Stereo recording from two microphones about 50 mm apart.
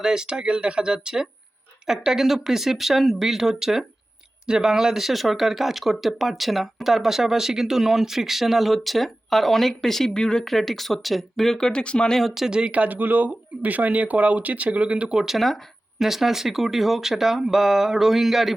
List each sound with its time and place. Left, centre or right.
0.0 s speech: centre
12.3 s speech: centre
15.2 s speech: centre